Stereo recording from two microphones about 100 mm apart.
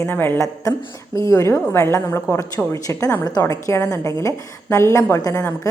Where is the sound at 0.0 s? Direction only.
20° left (ahead or behind).